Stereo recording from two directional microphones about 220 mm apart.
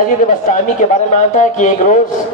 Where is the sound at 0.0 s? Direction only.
35° left (ahead or behind).